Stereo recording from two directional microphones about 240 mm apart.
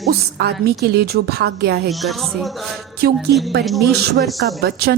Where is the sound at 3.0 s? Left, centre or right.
Right.